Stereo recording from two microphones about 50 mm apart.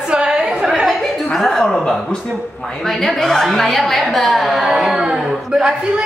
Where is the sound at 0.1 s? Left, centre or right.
Centre.